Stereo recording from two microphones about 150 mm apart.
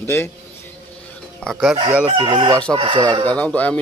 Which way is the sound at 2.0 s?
35° right (ahead or behind).